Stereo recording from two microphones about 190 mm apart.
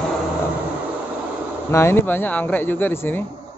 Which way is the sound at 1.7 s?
15° left (ahead or behind).